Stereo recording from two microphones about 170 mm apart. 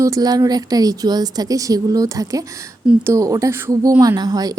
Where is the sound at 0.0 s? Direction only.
20° right (ahead or behind).